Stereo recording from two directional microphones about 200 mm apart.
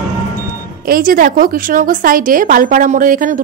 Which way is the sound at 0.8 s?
45° right (ahead or behind).